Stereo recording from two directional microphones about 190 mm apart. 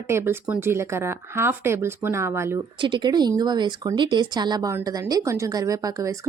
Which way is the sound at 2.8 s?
25° right (ahead or behind).